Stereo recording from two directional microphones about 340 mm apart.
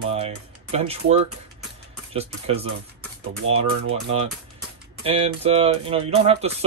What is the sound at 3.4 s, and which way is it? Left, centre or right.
Speech, right.